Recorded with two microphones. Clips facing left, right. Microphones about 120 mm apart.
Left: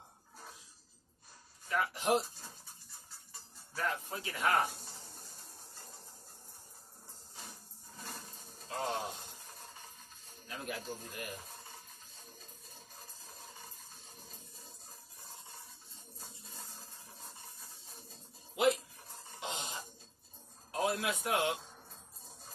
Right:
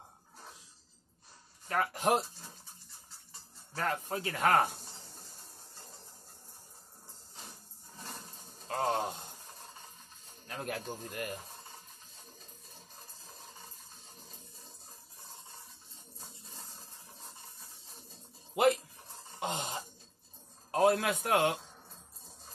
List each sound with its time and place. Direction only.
1.7 s speech: 50° right (ahead or behind)
3.7 s speech: 50° right (ahead or behind)
8.6 s a sound: 50° right (ahead or behind)
10.4 s speech: 50° right (ahead or behind)
19.4 s a sound: 50° right (ahead or behind)
20.7 s a man's voice: 55° right (ahead or behind)